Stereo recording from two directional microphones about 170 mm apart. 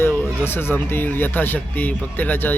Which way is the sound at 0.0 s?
15° left (ahead or behind).